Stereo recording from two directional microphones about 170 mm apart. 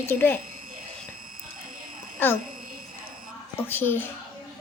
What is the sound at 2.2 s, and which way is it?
Speech, 10° left (ahead or behind).